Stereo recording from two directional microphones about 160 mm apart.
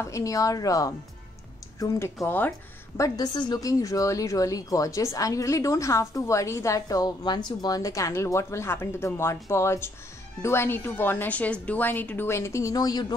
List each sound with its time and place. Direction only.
0.0 s a woman's voice: 20° left (ahead or behind)
3.0 s a woman's voice: 25° left (ahead or behind)